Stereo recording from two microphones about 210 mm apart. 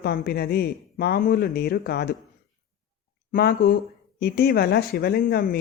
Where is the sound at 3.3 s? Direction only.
45° left (ahead or behind).